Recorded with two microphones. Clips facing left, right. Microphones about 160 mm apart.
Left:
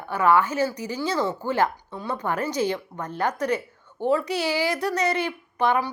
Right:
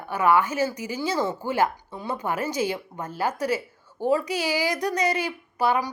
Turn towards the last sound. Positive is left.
turn(degrees=-10)  # may be behind; listen again after turning